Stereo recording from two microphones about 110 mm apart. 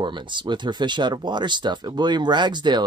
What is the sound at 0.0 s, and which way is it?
Speech, 45° right (ahead or behind).